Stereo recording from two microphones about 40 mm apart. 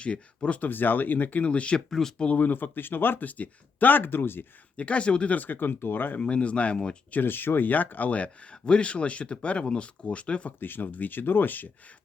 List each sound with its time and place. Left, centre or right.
0.0 s speech: left
0.6 s speech: left
1.5 s speech: left
1.9 s speech: centre
2.2 s speech: left
2.5 s speech: left
3.2 s speech: left
4.8 s speech: left
5.3 s speech: left
6.1 s speech: left
7.2 s speech: left
7.7 s speech: left
10.6 s speech: left